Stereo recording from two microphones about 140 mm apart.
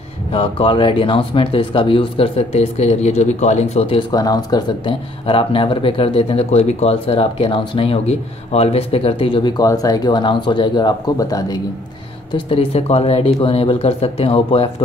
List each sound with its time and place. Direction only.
0.3 s speech: 40° left (ahead or behind)
4.1 s speech: 25° left (ahead or behind)
12.3 s speech: 40° left (ahead or behind)